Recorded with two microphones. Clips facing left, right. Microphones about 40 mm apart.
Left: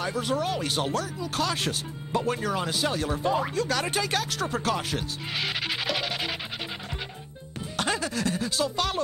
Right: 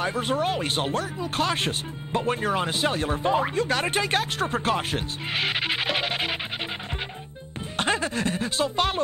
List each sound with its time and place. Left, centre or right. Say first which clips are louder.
0.0 s speech: right 3 dB; right
7.7 s speech: right 3 dB; right